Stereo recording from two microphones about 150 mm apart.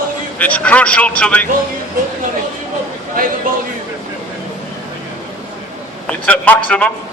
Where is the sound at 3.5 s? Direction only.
65° right (ahead or behind).